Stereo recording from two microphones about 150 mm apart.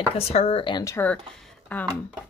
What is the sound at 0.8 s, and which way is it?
Speech, 20° left (ahead or behind).